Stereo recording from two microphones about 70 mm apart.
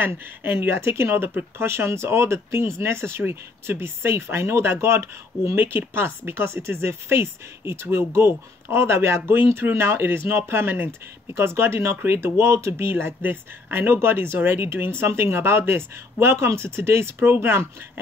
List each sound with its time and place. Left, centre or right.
0.0 s speech: right